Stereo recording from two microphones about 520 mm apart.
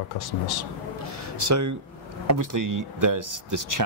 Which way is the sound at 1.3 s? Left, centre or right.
Right.